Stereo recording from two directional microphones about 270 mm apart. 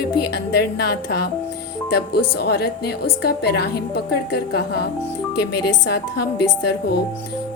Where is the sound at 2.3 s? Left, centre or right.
Left.